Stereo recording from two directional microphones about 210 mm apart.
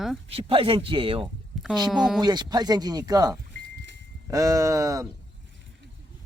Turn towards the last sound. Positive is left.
turn(degrees=-15)  # may be behind; listen again after turning